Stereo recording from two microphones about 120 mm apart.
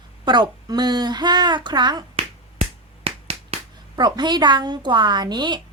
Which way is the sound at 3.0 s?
60° right (ahead or behind).